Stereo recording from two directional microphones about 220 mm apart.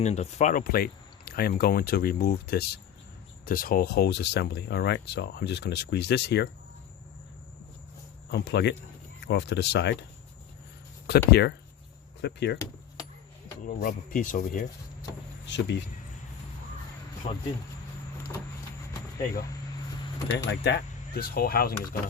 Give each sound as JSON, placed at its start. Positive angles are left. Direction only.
{"t": 0.0, "sound": "speech", "side_deg": 30}
{"t": 8.3, "sound": "speech", "side_deg": 50}
{"t": 11.0, "sound": "speech", "side_deg": 45}
{"t": 13.7, "sound": "speech", "side_deg": 40}
{"t": 15.4, "sound": "speech", "side_deg": 55}
{"t": 19.2, "sound": "speech", "side_deg": 45}